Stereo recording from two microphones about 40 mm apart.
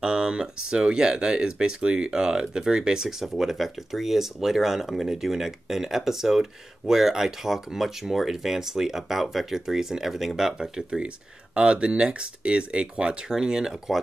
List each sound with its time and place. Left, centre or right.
0.0 s speech: right
10.9 s speech: right